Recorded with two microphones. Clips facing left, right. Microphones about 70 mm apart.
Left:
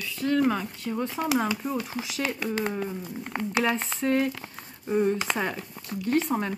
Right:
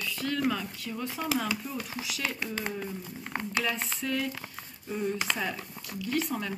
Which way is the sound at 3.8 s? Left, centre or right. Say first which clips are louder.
Left 7 dB; left.